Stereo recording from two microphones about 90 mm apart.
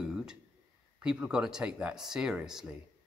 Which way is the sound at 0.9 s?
10° right (ahead or behind).